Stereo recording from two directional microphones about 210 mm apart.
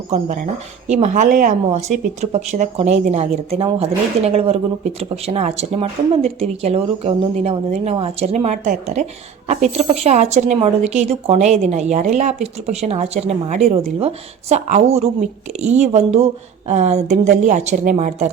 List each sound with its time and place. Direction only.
0.9 s a woman's voice: 35° right (ahead or behind)